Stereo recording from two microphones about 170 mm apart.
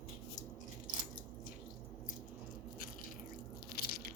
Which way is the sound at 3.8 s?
65° left (ahead or behind).